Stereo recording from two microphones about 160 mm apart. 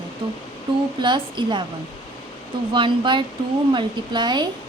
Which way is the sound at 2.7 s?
30° right (ahead or behind).